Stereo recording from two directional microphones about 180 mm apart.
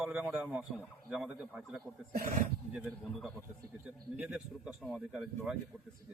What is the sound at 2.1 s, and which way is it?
Speech, 50° right (ahead or behind).